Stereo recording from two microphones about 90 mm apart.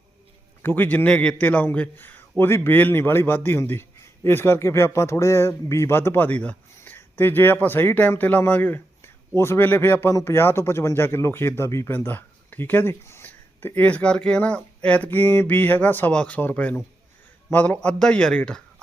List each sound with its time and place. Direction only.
0.6 s a man's voice: 20° left (ahead or behind)
11.9 s speech: 20° left (ahead or behind)